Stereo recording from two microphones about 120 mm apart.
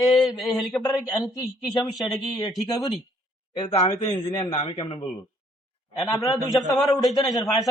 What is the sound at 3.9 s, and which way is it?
A man's voice, 45° left (ahead or behind).